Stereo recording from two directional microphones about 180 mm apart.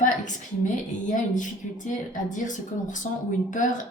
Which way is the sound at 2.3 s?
45° left (ahead or behind).